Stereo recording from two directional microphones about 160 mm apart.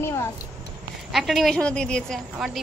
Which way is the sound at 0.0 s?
15° left (ahead or behind).